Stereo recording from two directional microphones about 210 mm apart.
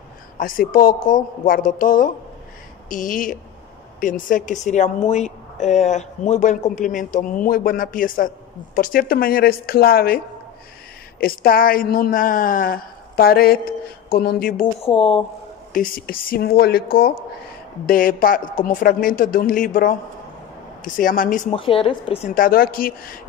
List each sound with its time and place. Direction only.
0.4 s a woman's voice: 40° left (ahead or behind)
14.8 s speech: 25° left (ahead or behind)
15.7 s a woman's voice: 40° left (ahead or behind)
21.5 s speech: 25° left (ahead or behind)
22.3 s speech: 40° left (ahead or behind)